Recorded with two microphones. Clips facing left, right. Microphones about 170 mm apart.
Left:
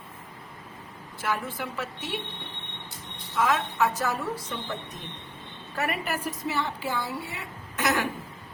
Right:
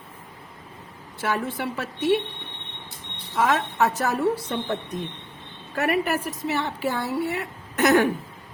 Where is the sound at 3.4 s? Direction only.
60° right (ahead or behind).